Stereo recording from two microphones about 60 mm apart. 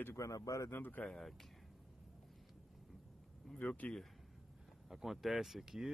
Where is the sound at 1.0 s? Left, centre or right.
Centre.